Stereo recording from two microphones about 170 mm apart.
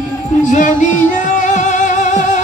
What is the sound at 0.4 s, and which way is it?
Music, 45° left (ahead or behind).